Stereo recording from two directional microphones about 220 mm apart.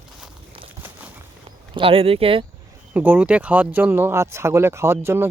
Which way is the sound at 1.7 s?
25° right (ahead or behind).